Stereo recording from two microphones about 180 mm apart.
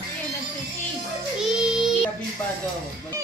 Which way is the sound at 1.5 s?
5° right (ahead or behind).